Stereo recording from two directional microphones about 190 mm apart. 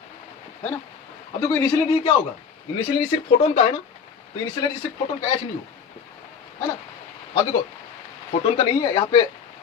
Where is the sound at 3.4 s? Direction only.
35° left (ahead or behind).